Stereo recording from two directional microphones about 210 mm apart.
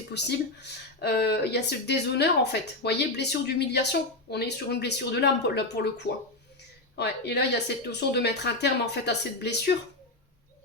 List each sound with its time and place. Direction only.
0.1 s speech: 55° left (ahead or behind)
6.9 s speech: 50° left (ahead or behind)